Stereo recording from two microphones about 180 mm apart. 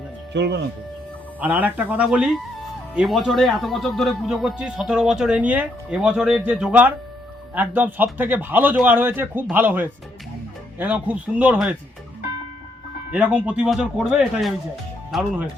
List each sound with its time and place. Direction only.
0.3 s speech: 70° right (ahead or behind)
1.4 s a man's voice: 10° right (ahead or behind)
13.1 s speech: 5° right (ahead or behind)